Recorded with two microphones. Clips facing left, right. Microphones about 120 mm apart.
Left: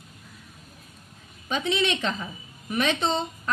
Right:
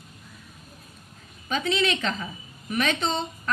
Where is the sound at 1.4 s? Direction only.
20° left (ahead or behind).